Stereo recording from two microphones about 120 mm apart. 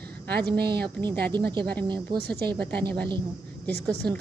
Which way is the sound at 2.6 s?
10° left (ahead or behind).